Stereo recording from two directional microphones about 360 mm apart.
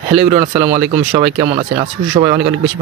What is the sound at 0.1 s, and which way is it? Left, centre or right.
Speech, centre.